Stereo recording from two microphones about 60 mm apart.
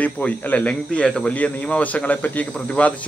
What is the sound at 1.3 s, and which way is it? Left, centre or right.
Speech, left.